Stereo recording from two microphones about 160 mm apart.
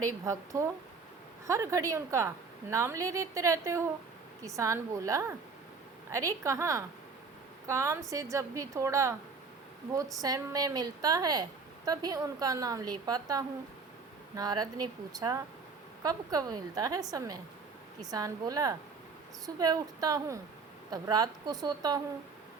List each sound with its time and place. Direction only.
0.0 s a woman's voice: 20° right (ahead or behind)
10.2 s a woman's voice: 25° right (ahead or behind)